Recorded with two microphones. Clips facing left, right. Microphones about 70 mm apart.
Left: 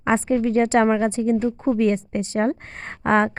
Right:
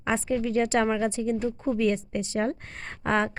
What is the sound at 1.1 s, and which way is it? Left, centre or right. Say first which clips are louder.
Speech: left 6 dB; left.